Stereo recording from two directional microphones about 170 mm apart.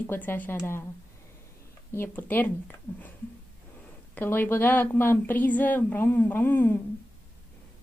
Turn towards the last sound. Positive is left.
turn(degrees=10)  # may be behind; listen again after turning